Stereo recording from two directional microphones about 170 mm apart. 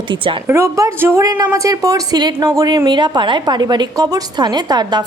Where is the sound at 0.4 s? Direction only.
15° right (ahead or behind).